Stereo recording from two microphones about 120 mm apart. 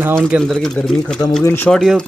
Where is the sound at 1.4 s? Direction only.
20° left (ahead or behind).